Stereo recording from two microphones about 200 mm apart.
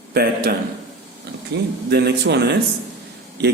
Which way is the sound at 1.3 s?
55° right (ahead or behind).